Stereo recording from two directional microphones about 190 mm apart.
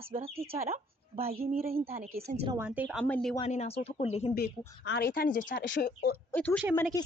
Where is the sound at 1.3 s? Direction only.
50° right (ahead or behind).